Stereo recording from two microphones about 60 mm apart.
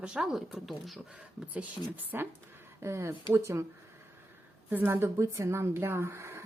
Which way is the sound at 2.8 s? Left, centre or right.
Right.